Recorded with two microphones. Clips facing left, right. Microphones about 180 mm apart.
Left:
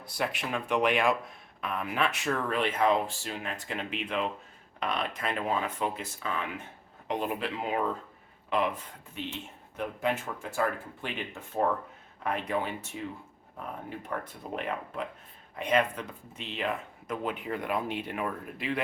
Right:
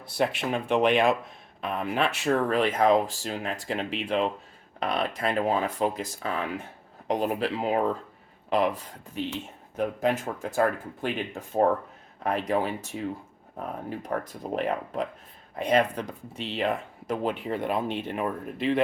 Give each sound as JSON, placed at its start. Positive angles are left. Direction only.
{"t": 0.0, "sound": "speech", "side_deg": -25}